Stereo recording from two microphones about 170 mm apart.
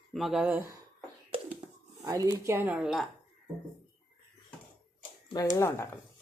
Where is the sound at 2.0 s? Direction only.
20° right (ahead or behind); by 3.0 s 5° right (ahead or behind).